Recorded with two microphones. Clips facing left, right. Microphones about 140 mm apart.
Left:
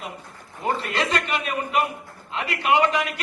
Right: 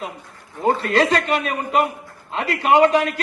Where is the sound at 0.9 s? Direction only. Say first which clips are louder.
Right 7 dB; 35° right (ahead or behind).